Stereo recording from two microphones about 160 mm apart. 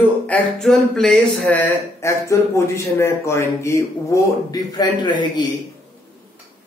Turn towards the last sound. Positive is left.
turn(degrees=25)  # may be behind; listen again after turning